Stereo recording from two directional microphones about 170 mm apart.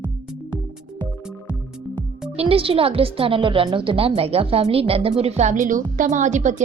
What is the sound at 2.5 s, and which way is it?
A woman's voice, 35° right (ahead or behind).